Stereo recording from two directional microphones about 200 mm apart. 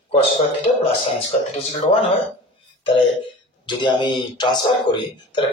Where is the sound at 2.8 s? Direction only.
25° left (ahead or behind).